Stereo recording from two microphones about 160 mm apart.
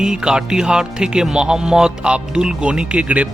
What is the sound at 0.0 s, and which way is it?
Speech, 5° right (ahead or behind).